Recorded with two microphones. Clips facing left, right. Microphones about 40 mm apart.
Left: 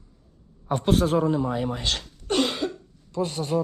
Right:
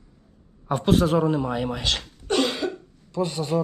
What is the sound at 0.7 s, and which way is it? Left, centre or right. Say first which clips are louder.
A man's voice: right 1 dB; right.